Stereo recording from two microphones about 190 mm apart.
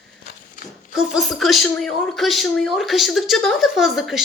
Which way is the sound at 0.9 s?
5° right (ahead or behind).